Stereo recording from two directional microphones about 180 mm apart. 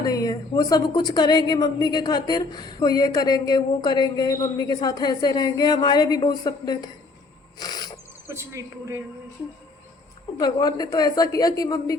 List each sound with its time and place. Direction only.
0.0 s a woman's voice: 20° left (ahead or behind)
7.6 s a sound: 20° left (ahead or behind)
8.3 s speech: 15° right (ahead or behind)
10.3 s a woman's voice: 20° left (ahead or behind)